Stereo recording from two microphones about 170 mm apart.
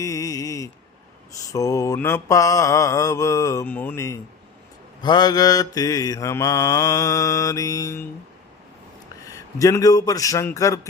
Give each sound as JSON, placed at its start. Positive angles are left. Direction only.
{"t": 0.0, "sound": "a sound", "side_deg": 20}
{"t": 1.5, "sound": "mantra", "side_deg": 20}
{"t": 9.3, "sound": "mantra", "side_deg": 20}